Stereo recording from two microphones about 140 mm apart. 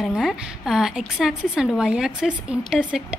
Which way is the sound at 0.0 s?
Centre (ahead or behind).